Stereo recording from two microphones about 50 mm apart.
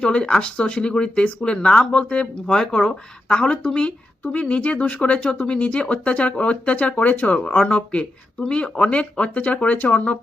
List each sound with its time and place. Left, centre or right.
0.0 s speech: left
3.6 s speech: centre
3.8 s speech: left